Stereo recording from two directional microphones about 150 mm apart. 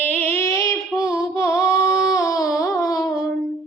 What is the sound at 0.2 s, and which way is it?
Female singing, 15° left (ahead or behind).